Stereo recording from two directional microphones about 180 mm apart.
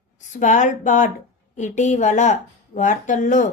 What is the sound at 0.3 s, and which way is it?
A woman's voice, 45° left (ahead or behind).